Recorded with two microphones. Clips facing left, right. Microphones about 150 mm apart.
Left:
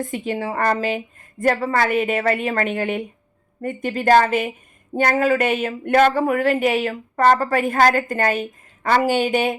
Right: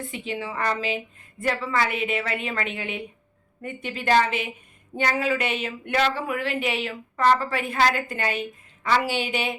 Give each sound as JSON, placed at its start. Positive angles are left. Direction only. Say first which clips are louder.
{"t": 0.0, "sound": "speech", "louder": "left 7 dB", "side_deg": 45}